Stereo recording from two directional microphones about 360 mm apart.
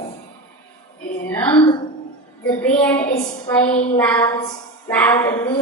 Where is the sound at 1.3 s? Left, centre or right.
Centre.